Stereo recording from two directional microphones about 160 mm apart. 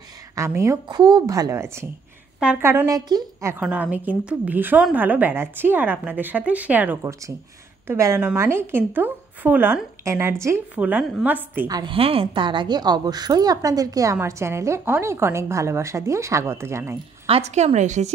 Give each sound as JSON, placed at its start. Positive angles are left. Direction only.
{"t": 0.4, "sound": "a woman's voice", "side_deg": -20}
{"t": 3.6, "sound": "a woman's voice", "side_deg": -10}
{"t": 11.7, "sound": "a woman's voice", "side_deg": -30}
{"t": 17.3, "sound": "a woman's voice", "side_deg": -45}